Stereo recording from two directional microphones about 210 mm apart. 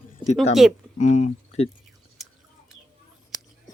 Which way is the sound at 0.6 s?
Centre (ahead or behind).